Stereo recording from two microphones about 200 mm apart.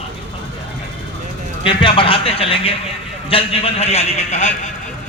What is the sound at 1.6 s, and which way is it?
A man's voice, 25° left (ahead or behind).